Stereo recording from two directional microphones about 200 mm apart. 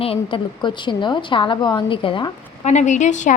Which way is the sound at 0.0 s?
25° left (ahead or behind).